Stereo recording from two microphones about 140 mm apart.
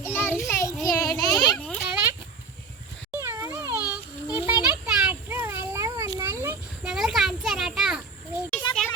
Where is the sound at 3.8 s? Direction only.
10° right (ahead or behind).